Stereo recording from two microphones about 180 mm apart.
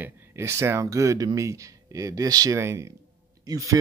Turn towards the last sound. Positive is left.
turn(degrees=-20)  # may be behind; listen again after turning